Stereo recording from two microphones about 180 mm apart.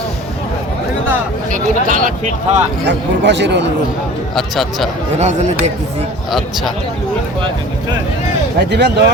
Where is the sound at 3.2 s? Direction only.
75° right (ahead or behind).